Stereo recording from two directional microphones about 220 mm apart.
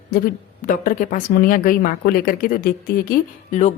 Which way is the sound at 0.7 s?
35° left (ahead or behind).